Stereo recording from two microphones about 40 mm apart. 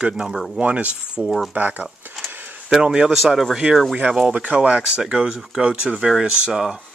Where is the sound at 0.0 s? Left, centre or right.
Centre.